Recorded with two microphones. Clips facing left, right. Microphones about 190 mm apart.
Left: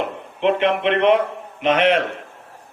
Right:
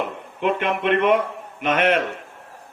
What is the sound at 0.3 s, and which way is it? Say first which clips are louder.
A man's voice: left 4 dB; 50° right (ahead or behind).